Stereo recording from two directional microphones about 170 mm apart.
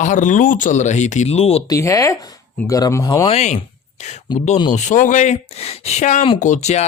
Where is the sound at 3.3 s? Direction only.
40° left (ahead or behind).